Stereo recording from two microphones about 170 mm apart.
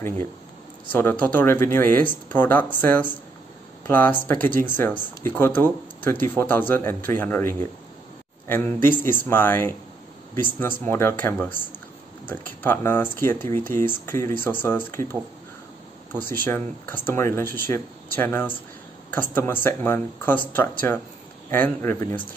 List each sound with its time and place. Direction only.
0.9 s speech: 10° left (ahead or behind)
16.3 s speech: 10° left (ahead or behind)